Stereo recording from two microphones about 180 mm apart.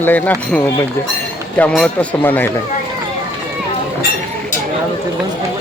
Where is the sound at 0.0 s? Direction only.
10° left (ahead or behind).